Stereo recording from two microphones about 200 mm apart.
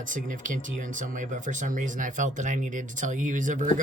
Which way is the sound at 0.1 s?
40° right (ahead or behind).